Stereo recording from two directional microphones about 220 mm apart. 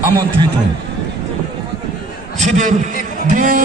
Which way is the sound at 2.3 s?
35° right (ahead or behind).